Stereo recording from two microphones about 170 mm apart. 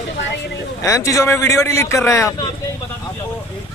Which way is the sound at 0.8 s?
20° left (ahead or behind).